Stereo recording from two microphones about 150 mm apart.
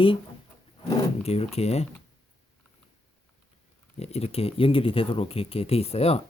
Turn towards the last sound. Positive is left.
turn(degrees=45)  # may be behind; listen again after turning